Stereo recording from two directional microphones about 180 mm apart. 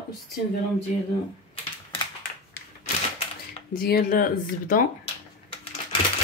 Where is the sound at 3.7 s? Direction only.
55° left (ahead or behind).